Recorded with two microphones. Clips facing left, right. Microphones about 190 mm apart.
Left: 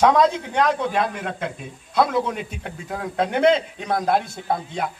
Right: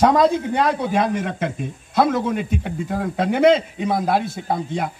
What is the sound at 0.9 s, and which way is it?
A man's voice, 45° right (ahead or behind).